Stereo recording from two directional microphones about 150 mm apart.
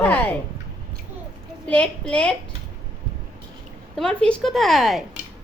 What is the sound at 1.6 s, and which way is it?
Speech, 10° left (ahead or behind).